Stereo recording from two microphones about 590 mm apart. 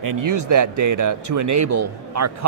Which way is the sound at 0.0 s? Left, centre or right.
Right.